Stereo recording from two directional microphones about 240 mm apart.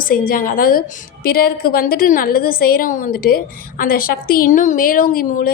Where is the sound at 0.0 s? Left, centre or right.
Left.